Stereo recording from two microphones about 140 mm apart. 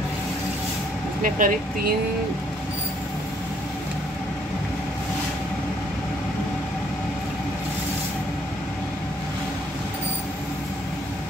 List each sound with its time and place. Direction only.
1.2 s speech: 75° right (ahead or behind)